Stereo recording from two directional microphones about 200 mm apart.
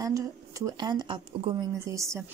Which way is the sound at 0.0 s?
15° right (ahead or behind).